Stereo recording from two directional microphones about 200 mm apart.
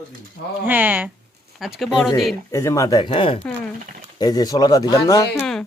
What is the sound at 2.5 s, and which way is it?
Speech, 15° left (ahead or behind).